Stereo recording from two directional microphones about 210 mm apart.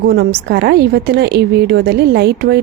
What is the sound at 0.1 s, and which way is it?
A woman's voice, 50° right (ahead or behind).